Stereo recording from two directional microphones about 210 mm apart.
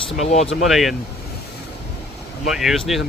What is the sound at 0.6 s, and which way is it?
Speech, centre (ahead or behind).